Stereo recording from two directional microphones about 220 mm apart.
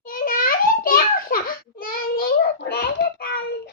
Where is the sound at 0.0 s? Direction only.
40° left (ahead or behind).